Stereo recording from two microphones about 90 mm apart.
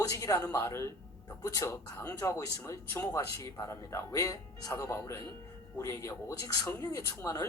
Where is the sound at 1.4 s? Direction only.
40° left (ahead or behind).